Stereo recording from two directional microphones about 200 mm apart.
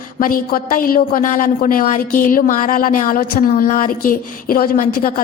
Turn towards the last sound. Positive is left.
turn(degrees=45)  # may be behind; listen again after turning